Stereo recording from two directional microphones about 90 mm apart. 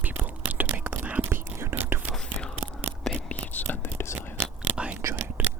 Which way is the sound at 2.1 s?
10° left (ahead or behind).